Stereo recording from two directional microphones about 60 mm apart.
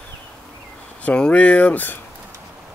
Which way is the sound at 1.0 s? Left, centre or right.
Centre.